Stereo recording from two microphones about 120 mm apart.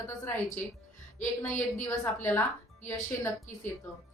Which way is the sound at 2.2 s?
20° left (ahead or behind).